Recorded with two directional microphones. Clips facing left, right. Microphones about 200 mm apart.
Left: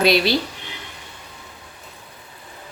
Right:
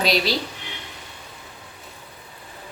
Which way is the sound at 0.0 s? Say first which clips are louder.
Left 5 dB; 60° left (ahead or behind).